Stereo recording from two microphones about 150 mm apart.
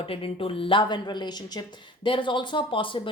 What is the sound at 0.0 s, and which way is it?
Speech, 40° left (ahead or behind).